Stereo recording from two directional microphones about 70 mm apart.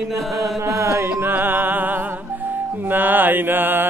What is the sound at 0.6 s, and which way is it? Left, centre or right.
Music, right.